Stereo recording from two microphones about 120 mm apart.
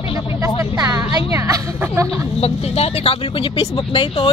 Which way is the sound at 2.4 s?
60° left (ahead or behind).